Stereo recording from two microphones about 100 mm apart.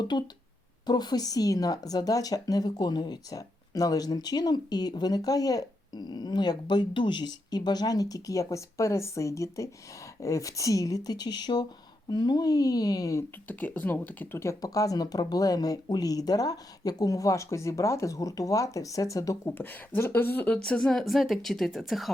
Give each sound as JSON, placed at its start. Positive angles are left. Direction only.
{"t": 0.0, "sound": "speech", "side_deg": 50}
{"t": 13.5, "sound": "speech", "side_deg": 15}
{"t": 19.5, "sound": "speech", "side_deg": 20}
{"t": 20.6, "sound": "speech", "side_deg": 5}